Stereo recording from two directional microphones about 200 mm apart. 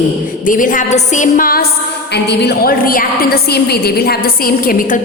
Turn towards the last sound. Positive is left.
turn(degrees=45)  # may be behind; listen again after turning